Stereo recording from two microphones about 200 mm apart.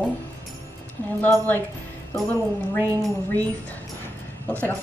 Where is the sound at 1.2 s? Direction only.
10° left (ahead or behind).